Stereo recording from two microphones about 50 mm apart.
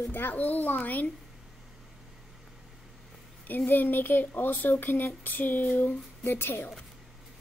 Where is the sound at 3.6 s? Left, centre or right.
Left.